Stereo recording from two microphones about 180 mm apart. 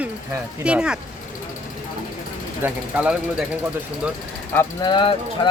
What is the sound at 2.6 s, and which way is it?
Speech, 5° right (ahead or behind).